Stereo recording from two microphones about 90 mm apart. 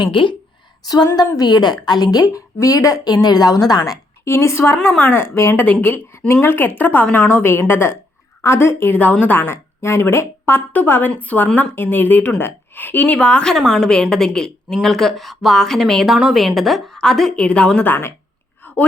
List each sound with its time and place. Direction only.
0.0 s a woman's voice: 65° left (ahead or behind)
1.4 s a woman's voice: 50° left (ahead or behind)
4.3 s a woman's voice: 30° left (ahead or behind)
7.7 s a woman's voice: 25° left (ahead or behind)
13.1 s a woman's voice: 10° left (ahead or behind)
16.1 s a woman's voice: 10° right (ahead or behind); by 18.1 s 20° left (ahead or behind)
18.6 s a sound: 20° left (ahead or behind)